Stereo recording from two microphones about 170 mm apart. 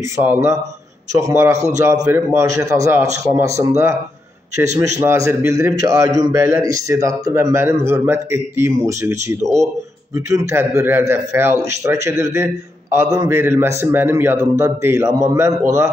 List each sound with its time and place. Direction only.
0.2 s a man's voice: 15° right (ahead or behind)